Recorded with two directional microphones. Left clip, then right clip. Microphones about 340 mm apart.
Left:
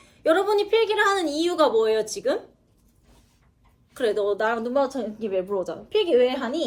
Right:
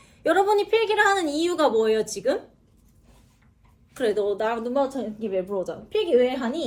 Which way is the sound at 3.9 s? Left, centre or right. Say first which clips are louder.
Even; centre.